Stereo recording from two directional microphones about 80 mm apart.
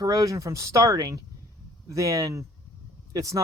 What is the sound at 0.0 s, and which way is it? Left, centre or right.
Speech, right.